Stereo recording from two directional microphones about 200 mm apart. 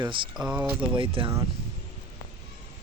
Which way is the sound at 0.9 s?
25° right (ahead or behind).